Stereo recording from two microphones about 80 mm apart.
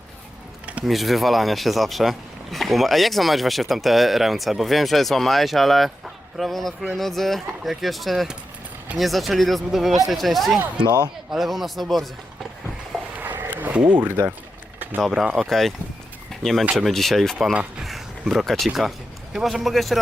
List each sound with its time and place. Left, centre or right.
0.9 s speech: centre
10.8 s speech: right
11.3 s speech: centre
13.1 s a sound: right
15.0 s speech: centre
17.5 s speech: centre
17.8 s a sound: centre
18.7 s speech: centre